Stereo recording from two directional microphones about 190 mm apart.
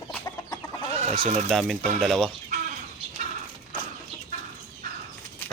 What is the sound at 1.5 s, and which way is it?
Speech, centre (ahead or behind).